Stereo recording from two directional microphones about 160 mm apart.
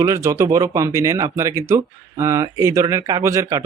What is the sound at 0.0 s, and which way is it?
Speech, 20° right (ahead or behind).